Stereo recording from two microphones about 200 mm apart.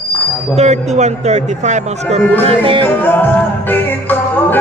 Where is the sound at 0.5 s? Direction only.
35° right (ahead or behind).